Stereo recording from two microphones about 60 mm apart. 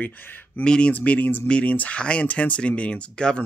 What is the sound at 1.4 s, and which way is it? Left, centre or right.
Speech, centre.